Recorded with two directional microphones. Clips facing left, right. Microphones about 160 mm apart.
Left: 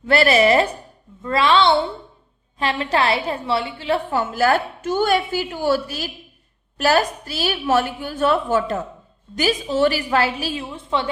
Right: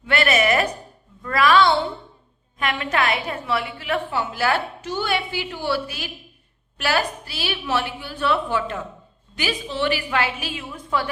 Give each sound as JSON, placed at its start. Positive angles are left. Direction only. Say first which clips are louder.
{"t": 0.0, "sound": "a woman's voice", "louder": "left 5 dB", "side_deg": 35}
{"t": 4.1, "sound": "a woman's voice", "louder": "left 5 dB", "side_deg": 45}